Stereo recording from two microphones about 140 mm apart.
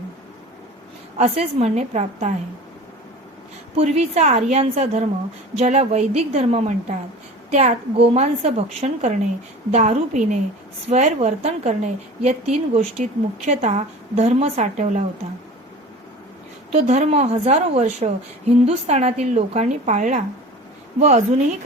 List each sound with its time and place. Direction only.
1.2 s a woman's voice: 45° right (ahead or behind)
3.8 s a woman's voice: 50° right (ahead or behind)
16.7 s a woman's voice: 55° right (ahead or behind)